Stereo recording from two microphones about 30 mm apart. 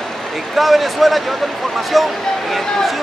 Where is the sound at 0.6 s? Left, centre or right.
Centre.